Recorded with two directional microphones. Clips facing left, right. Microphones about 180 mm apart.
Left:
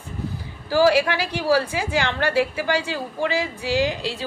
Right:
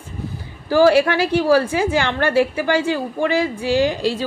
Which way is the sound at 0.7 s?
50° right (ahead or behind).